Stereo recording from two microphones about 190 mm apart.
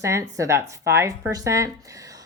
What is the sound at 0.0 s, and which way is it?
A woman's voice, 15° right (ahead or behind).